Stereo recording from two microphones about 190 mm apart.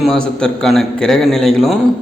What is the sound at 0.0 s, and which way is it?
A man's voice, 5° left (ahead or behind).